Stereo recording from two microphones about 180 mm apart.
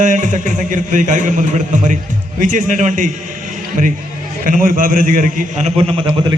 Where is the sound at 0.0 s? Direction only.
45° right (ahead or behind).